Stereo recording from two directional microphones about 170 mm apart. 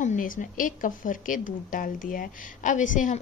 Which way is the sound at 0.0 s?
50° left (ahead or behind).